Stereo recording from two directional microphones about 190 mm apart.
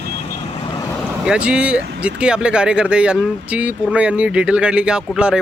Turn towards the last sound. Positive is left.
turn(degrees=-5)  # may be behind; listen again after turning